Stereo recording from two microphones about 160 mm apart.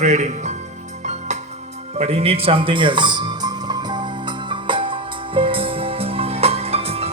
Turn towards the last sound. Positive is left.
turn(degrees=-40)  # may be behind; listen again after turning